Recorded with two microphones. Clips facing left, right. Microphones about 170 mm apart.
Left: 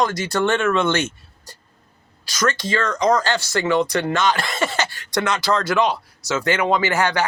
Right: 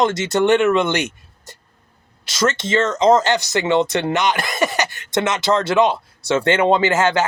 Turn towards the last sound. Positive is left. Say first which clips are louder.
# right 3 dB
turn(degrees=-20)  # may be behind; listen again after turning